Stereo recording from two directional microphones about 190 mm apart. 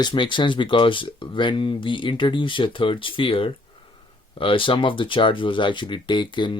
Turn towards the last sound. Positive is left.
turn(degrees=25)  # may be behind; listen again after turning